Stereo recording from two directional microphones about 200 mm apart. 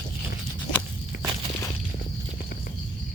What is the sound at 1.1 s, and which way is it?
Walk, 45° left (ahead or behind).